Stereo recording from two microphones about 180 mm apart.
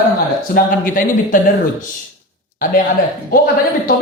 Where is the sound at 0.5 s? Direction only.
50° left (ahead or behind).